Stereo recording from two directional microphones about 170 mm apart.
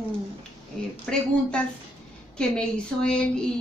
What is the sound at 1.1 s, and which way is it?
A woman's voice, 5° left (ahead or behind).